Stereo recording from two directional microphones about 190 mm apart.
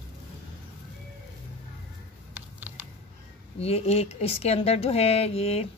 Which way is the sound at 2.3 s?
10° right (ahead or behind).